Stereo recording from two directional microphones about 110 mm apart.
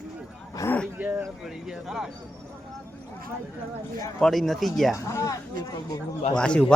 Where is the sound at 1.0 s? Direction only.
15° right (ahead or behind).